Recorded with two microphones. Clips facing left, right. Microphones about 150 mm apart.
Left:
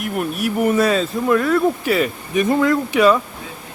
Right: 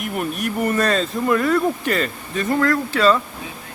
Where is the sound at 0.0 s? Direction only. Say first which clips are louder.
Left 2 dB; centre (ahead or behind).